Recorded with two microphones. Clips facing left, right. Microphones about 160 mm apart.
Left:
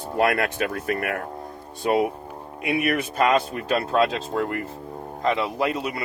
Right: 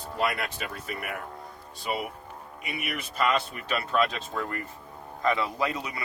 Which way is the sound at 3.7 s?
35° left (ahead or behind).